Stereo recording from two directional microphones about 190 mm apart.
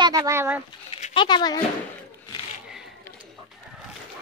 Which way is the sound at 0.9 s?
30° left (ahead or behind).